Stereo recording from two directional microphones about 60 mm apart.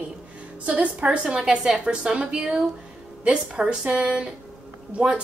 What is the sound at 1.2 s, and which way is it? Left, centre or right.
A woman's voice, centre.